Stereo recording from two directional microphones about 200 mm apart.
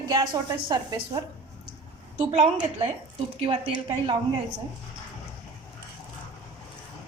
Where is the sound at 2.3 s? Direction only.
30° right (ahead or behind).